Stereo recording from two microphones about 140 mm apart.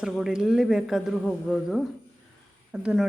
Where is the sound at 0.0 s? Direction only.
5° right (ahead or behind).